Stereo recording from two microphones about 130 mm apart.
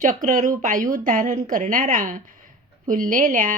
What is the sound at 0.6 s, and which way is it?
Speech, 90° right.